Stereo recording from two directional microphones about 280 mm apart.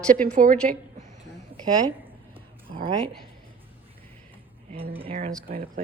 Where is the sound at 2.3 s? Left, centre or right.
Centre.